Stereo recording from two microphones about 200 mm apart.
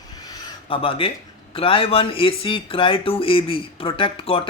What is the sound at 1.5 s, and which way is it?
Speech, 30° left (ahead or behind).